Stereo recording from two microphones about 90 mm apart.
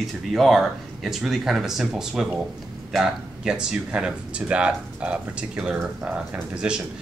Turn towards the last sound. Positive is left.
turn(degrees=-10)  # may be behind; listen again after turning